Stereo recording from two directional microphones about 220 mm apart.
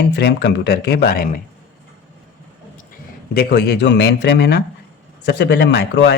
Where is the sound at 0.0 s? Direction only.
50° left (ahead or behind).